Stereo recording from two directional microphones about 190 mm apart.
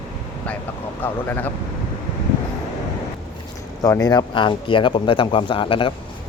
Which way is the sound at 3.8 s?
20° left (ahead or behind).